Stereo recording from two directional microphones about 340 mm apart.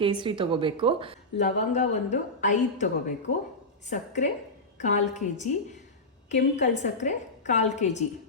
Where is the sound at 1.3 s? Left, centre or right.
Centre.